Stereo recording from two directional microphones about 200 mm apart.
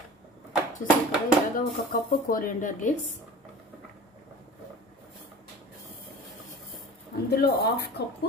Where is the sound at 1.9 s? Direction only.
45° left (ahead or behind).